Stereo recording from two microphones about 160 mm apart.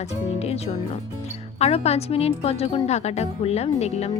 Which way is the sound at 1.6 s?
40° left (ahead or behind).